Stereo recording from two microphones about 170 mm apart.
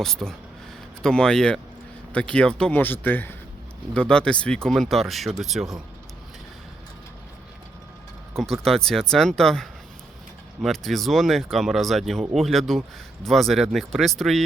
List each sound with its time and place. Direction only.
0.0 s speech: 5° left (ahead or behind)
8.6 s speech: 5° left (ahead or behind)